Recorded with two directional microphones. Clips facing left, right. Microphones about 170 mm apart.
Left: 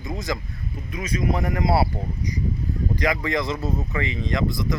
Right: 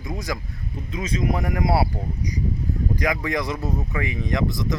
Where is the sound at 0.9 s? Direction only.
25° right (ahead or behind).